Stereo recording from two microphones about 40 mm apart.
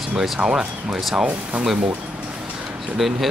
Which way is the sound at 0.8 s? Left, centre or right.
Centre.